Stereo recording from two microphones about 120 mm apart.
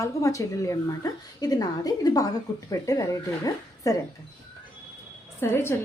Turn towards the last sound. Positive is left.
turn(degrees=20)  # may be behind; listen again after turning